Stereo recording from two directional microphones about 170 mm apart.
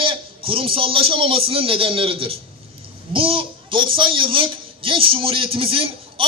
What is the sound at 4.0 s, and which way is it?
A man's voice, 30° right (ahead or behind).